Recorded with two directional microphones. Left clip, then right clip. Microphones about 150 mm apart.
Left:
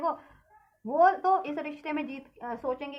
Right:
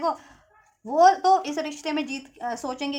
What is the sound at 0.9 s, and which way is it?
A woman's voice, 25° right (ahead or behind).